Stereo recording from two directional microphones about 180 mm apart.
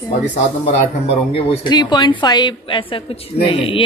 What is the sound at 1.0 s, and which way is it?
Speech, 35° left (ahead or behind).